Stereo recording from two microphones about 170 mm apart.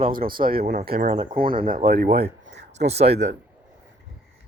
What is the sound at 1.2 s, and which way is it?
Speech, 30° right (ahead or behind).